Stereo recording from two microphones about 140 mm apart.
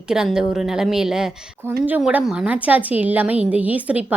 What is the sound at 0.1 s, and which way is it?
A woman's voice, 5° right (ahead or behind).